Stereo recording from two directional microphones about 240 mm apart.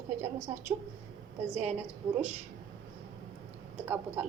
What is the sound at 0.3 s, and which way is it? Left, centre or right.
Speech, right.